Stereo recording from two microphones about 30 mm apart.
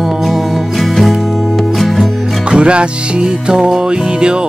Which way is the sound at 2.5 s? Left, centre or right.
Right.